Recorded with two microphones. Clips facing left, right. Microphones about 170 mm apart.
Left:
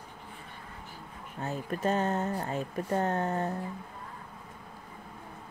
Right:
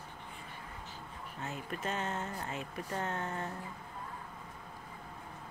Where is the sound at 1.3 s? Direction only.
35° left (ahead or behind).